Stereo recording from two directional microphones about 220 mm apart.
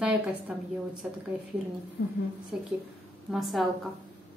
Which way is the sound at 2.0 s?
50° left (ahead or behind).